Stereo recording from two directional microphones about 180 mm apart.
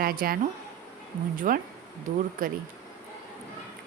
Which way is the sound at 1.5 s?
50° right (ahead or behind).